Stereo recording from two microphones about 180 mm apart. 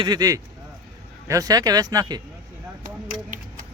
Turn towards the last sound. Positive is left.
turn(degrees=-45)  # may be behind; listen again after turning